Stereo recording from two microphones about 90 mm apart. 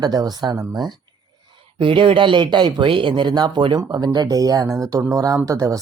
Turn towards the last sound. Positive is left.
turn(degrees=-40)  # may be behind; listen again after turning